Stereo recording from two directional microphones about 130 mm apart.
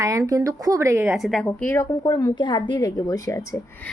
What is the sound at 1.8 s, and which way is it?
A woman's voice, 30° left (ahead or behind).